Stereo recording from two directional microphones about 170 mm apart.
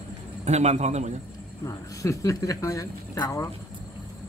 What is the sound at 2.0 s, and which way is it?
Speech, 20° left (ahead or behind).